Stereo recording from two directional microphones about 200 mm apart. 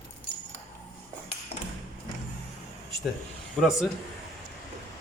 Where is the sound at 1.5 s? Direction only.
30° left (ahead or behind).